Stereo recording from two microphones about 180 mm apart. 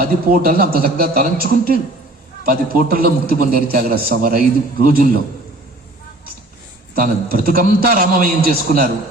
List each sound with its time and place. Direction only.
0.0 s a man's voice: 55° right (ahead or behind)
7.0 s a man's voice: 55° right (ahead or behind)